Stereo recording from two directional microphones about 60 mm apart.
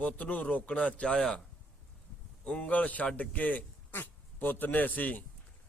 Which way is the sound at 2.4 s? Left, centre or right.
Centre.